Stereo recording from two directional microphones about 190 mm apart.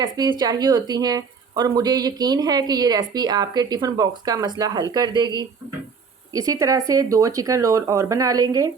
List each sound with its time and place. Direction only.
0.0 s speech: 20° right (ahead or behind)